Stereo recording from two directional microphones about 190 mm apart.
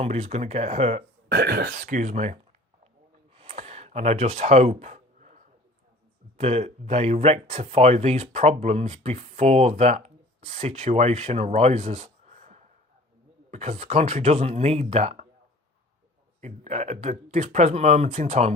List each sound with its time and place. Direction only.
0.0 s speech: 35° right (ahead or behind)
1.3 s speech: 55° right (ahead or behind); by 2.4 s 35° right (ahead or behind)
3.3 s a sound: 30° right (ahead or behind)
6.3 s speech: 35° right (ahead or behind)
16.4 s speech: 35° right (ahead or behind)